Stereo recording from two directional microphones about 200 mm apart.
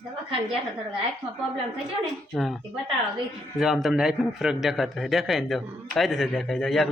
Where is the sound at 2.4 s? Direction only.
Centre (ahead or behind).